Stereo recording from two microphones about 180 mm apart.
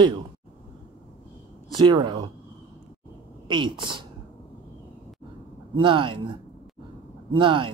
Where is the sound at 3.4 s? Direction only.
25° right (ahead or behind).